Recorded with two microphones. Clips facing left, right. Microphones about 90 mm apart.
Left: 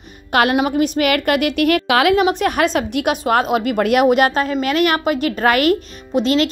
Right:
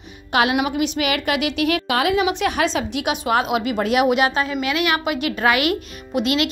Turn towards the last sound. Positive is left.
turn(degrees=35)  # may be behind; listen again after turning